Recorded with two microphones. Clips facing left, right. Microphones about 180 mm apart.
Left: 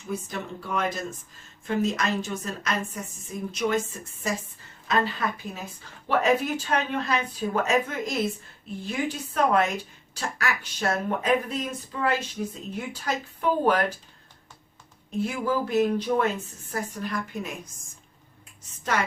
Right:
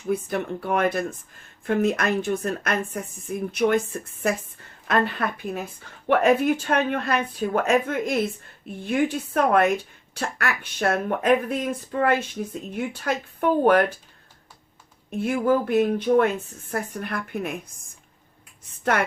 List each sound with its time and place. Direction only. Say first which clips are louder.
0.1 s speech: right 7 dB; 60° right (ahead or behind)
15.1 s speech: right 5 dB; 55° right (ahead or behind)
18.9 s speech: even; 60° right (ahead or behind)